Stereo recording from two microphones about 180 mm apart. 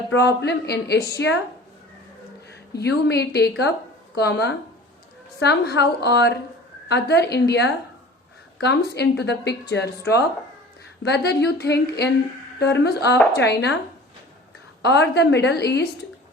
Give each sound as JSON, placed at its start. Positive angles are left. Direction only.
{"t": 0.1, "sound": "a woman's voice", "side_deg": 70}
{"t": 2.7, "sound": "a woman's voice", "side_deg": 65}
{"t": 14.8, "sound": "a woman's voice", "side_deg": 70}